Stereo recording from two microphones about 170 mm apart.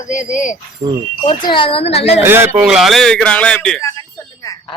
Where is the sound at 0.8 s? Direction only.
30° right (ahead or behind).